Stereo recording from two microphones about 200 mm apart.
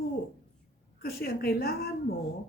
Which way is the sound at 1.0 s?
50° left (ahead or behind).